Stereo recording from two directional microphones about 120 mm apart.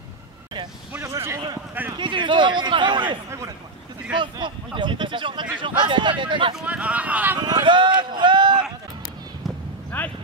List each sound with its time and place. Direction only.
0.9 s a man's voice: 25° right (ahead or behind)
2.0 s a man's voice: 40° right (ahead or behind)
3.3 s a man's voice: 25° right (ahead or behind)
4.2 s a man's voice: 40° right (ahead or behind)
6.5 s speech: 10° right (ahead or behind)
7.3 s speech: 35° right (ahead or behind)
9.9 s a sound: 15° left (ahead or behind)